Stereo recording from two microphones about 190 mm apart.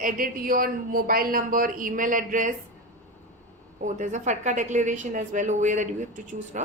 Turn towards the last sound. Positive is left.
turn(degrees=-40)  # may be behind; listen again after turning